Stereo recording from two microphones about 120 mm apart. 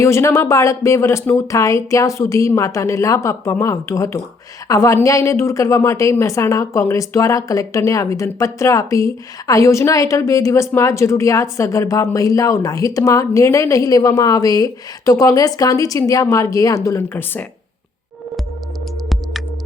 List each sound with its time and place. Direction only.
0.0 s a woman's voice: 25° left (ahead or behind)